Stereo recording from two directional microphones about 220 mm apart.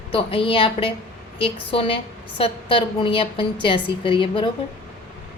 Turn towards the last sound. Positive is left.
turn(degrees=25)  # may be behind; listen again after turning